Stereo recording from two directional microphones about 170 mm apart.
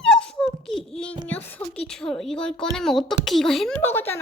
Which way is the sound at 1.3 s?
10° left (ahead or behind).